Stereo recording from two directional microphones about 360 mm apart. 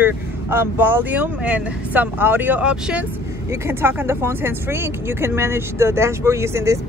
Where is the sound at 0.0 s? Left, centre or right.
Centre.